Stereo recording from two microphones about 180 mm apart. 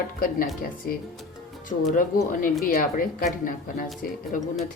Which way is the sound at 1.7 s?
35° left (ahead or behind).